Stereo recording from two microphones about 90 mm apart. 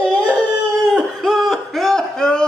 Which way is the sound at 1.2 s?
Centre (ahead or behind).